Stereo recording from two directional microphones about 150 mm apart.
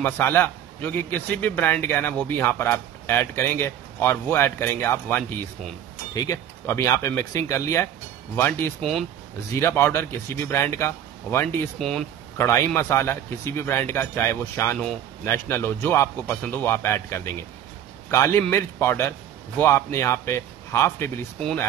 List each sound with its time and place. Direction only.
0.0 s a man's voice: 15° left (ahead or behind)
11.8 s speech: centre (ahead or behind)
12.4 s a man's voice: 15° left (ahead or behind)